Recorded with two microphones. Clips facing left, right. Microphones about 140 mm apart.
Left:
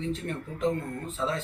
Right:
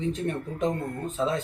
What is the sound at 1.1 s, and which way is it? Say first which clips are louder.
Speech: right 4 dB; 15° right (ahead or behind).